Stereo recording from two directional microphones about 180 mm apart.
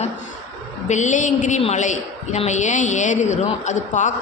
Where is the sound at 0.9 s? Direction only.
40° left (ahead or behind).